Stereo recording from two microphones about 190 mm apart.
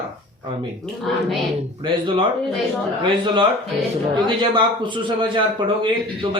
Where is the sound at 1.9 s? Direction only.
25° right (ahead or behind).